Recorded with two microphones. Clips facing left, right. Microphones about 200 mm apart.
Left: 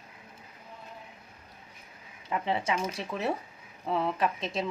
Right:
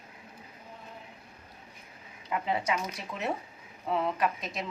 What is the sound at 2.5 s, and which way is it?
Speech, 25° left (ahead or behind).